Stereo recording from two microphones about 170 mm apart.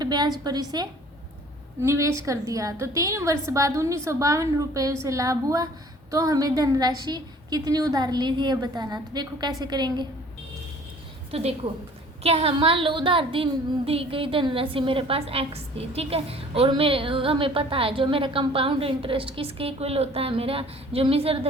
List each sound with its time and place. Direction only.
0.0 s a woman's voice: 25° right (ahead or behind)
11.3 s a woman's voice: 35° right (ahead or behind)